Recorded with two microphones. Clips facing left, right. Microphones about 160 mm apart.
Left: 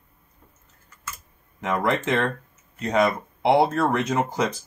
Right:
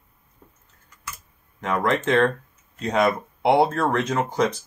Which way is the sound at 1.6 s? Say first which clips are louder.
Right 1 dB; 5° left (ahead or behind).